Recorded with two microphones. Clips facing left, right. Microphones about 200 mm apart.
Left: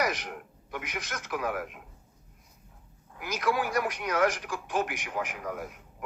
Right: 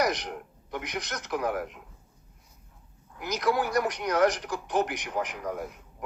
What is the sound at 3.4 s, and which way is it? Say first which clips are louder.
A man's voice: right 2 dB; 40° right (ahead or behind).